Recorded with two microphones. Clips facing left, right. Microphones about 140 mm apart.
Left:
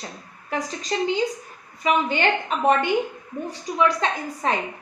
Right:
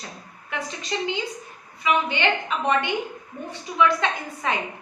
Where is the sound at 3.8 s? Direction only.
40° left (ahead or behind).